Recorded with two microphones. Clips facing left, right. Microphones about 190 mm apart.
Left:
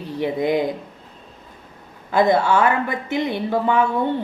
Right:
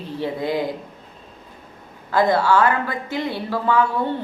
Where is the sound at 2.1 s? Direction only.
20° left (ahead or behind).